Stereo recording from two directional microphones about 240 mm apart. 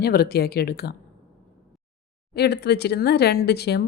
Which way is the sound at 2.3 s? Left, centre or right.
Left.